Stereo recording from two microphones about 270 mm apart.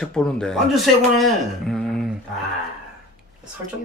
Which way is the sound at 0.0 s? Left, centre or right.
Centre.